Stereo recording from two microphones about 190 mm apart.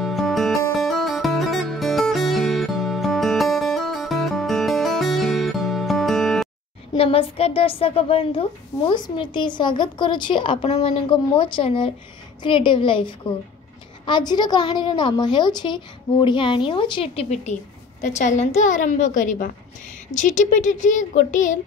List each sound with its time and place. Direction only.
0.0 s music: centre (ahead or behind)
6.9 s a woman's voice: 30° left (ahead or behind)